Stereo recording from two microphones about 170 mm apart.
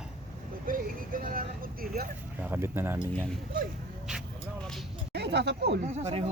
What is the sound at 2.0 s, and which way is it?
Speech, 65° right (ahead or behind).